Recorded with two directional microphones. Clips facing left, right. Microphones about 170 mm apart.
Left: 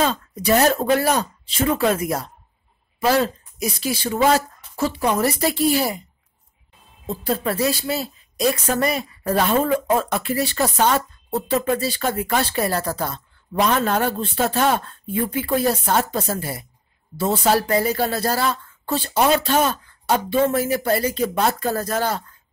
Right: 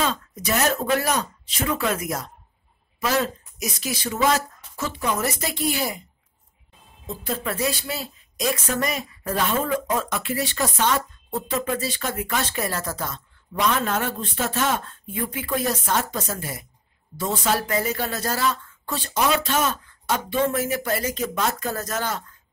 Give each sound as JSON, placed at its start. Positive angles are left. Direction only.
{"t": 0.1, "sound": "a woman's voice", "side_deg": 30}
{"t": 3.5, "sound": "a woman's voice", "side_deg": 30}
{"t": 7.1, "sound": "a woman's voice", "side_deg": 35}